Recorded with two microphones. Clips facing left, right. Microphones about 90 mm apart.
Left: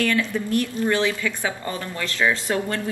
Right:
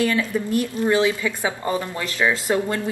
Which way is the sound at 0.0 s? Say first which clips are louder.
Right 1 dB; 15° right (ahead or behind).